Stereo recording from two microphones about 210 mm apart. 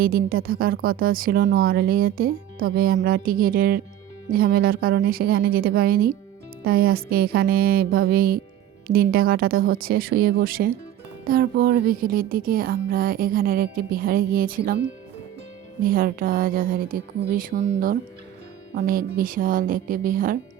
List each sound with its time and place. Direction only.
0.0 s speech: 45° right (ahead or behind)
15.8 s speech: 45° right (ahead or behind)